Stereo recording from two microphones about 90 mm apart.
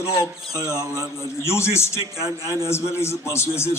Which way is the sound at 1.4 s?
30° left (ahead or behind).